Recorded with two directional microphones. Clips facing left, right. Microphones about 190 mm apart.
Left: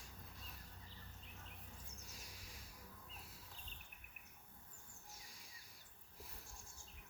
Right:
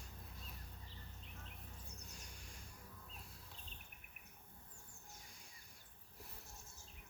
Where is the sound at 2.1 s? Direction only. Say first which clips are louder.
Right 1 dB; centre (ahead or behind).